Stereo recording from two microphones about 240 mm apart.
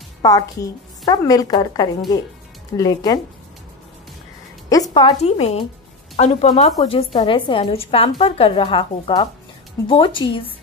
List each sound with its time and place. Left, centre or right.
0.2 s a woman's voice: centre
4.6 s a woman's voice: centre